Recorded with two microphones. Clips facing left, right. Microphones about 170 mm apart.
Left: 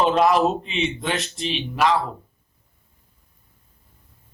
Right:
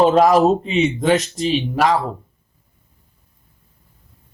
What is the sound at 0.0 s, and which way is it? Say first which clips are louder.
Speech: right 5 dB; 40° right (ahead or behind).